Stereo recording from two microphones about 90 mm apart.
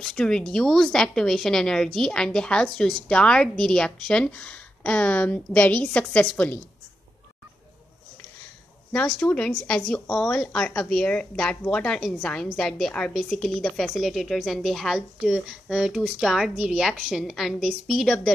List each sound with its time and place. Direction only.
0.0 s speech: 10° left (ahead or behind)
9.2 s a woman's voice: 20° left (ahead or behind)
9.7 s a woman's voice: 5° left (ahead or behind)